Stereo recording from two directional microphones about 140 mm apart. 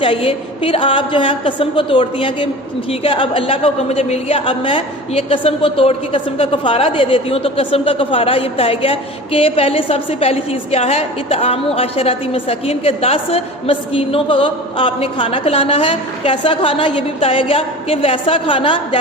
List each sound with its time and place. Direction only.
0.0 s a woman's voice: 40° left (ahead or behind)